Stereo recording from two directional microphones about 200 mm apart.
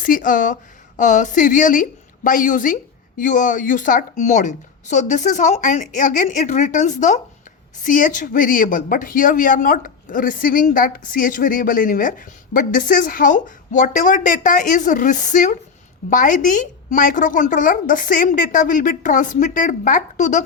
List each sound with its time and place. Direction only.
0.0 s a woman's voice: 45° left (ahead or behind)